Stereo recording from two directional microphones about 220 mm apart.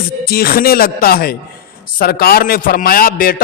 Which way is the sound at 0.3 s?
45° left (ahead or behind).